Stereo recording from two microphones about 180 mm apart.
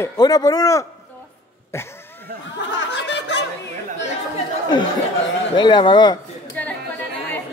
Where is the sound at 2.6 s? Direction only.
90° left; by 3.4 s 75° left (ahead or behind).